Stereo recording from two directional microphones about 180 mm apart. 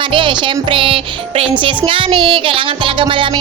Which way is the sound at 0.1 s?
25° right (ahead or behind).